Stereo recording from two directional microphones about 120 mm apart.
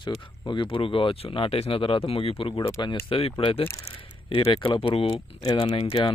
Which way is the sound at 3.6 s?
25° left (ahead or behind).